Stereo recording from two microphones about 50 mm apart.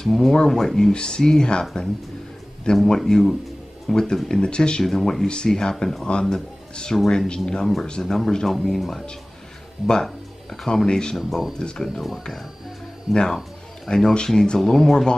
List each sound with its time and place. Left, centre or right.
0.0 s speech: centre
10.0 s music: centre
10.9 s speech: centre
11.1 s speech: centre
11.5 s speech: centre
11.8 s speech: centre
13.1 s speech: centre